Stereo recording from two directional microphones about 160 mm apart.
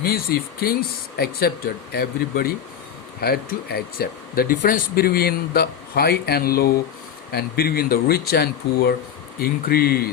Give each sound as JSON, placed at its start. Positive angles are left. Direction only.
{"t": 0.0, "sound": "speech", "side_deg": 70}
{"t": 9.4, "sound": "speech", "side_deg": 75}